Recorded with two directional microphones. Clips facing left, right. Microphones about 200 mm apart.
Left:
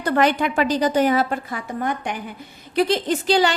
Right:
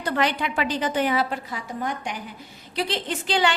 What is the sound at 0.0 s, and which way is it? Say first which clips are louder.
A woman's voice: left 6 dB; 50° left (ahead or behind).